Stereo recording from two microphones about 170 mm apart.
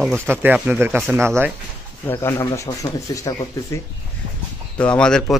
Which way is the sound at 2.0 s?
15° left (ahead or behind).